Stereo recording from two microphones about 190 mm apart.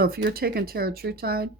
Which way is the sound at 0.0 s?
55° right (ahead or behind).